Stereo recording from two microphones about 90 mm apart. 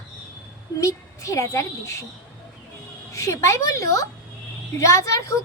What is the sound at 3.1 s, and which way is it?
Child singing, 35° left (ahead or behind).